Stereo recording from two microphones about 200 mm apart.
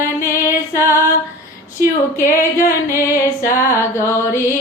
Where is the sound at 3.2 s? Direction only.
15° left (ahead or behind).